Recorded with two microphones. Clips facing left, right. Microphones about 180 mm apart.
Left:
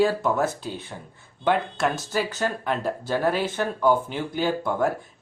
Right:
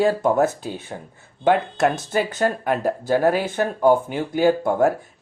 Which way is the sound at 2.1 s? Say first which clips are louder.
Right 5 dB; 55° right (ahead or behind).